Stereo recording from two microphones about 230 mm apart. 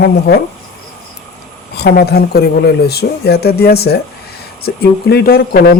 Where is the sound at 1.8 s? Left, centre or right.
Left.